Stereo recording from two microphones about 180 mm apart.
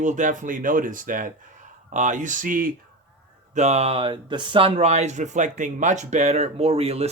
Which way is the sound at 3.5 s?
40° right (ahead or behind).